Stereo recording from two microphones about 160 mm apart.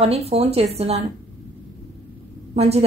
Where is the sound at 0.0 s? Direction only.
40° right (ahead or behind).